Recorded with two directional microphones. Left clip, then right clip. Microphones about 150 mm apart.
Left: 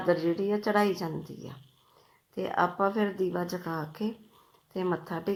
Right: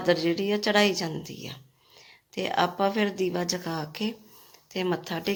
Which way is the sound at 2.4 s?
45° right (ahead or behind).